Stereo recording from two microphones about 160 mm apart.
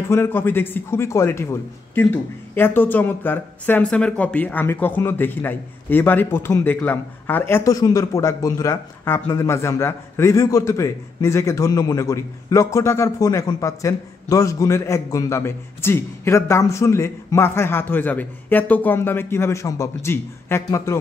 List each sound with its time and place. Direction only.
0.1 s a man's voice: 15° left (ahead or behind)